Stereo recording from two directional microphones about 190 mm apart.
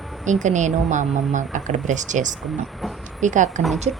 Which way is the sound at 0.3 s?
40° right (ahead or behind).